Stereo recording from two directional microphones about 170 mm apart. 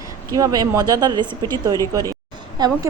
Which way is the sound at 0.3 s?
20° right (ahead or behind).